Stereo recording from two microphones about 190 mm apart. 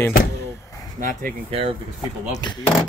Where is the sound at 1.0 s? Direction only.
45° right (ahead or behind).